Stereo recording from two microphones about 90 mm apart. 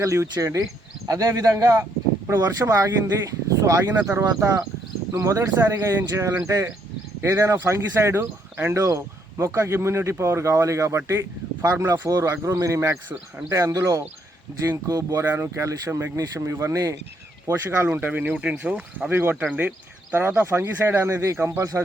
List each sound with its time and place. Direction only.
0.0 s speech: 35° right (ahead or behind)
1.7 s a sound: 25° right (ahead or behind)
2.3 s speech: 40° right (ahead or behind)
7.2 s speech: 35° right (ahead or behind)
16.2 s speech: 45° right (ahead or behind)
16.5 s speech: 35° right (ahead or behind)
17.7 s speech: 25° right (ahead or behind)